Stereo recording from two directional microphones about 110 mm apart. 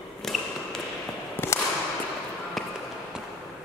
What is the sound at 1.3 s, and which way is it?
Whip, 20° left (ahead or behind).